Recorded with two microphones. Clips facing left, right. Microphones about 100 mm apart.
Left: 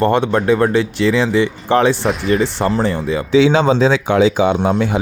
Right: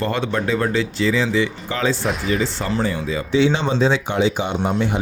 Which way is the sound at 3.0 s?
60° left (ahead or behind).